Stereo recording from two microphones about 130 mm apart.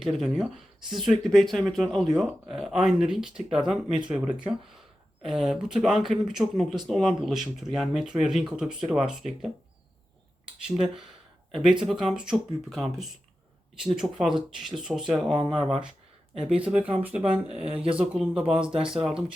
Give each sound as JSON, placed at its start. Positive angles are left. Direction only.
{"t": 0.0, "sound": "speech", "side_deg": 0}
{"t": 10.7, "sound": "speech", "side_deg": -5}
{"t": 18.7, "sound": "speech", "side_deg": -45}